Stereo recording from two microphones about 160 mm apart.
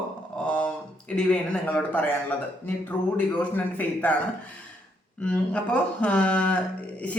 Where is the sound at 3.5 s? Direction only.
10° left (ahead or behind).